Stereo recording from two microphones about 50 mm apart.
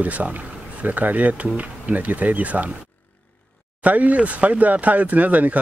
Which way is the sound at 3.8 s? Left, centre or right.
Right.